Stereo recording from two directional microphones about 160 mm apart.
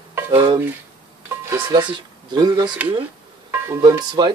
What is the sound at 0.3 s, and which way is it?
Dishes, 35° right (ahead or behind).